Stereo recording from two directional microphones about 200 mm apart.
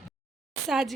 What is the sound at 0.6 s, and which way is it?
Speech, centre (ahead or behind).